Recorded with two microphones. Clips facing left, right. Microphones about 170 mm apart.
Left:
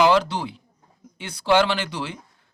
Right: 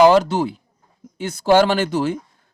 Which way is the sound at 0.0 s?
45° right (ahead or behind).